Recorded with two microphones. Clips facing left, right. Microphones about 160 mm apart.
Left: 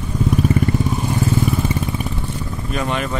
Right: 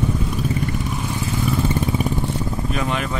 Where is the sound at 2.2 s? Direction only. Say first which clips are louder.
Right 3 dB; 25° right (ahead or behind).